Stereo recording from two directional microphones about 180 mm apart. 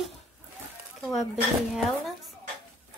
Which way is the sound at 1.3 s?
Centre (ahead or behind).